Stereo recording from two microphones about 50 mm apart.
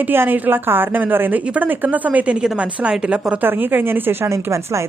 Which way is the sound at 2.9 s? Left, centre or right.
Centre.